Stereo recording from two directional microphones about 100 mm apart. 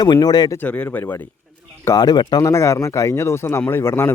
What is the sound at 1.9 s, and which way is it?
Speech, 45° left (ahead or behind).